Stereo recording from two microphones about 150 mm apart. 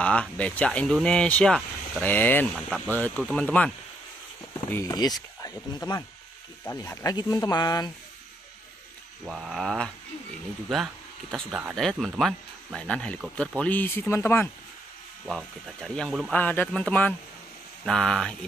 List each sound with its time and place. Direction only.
0.0 s speech: 10° left (ahead or behind); by 7.9 s 25° left (ahead or behind)
9.2 s speech: centre (ahead or behind)
11.7 s speech: 5° left (ahead or behind)
15.2 s speech: centre (ahead or behind)
16.3 s speech: 10° left (ahead or behind)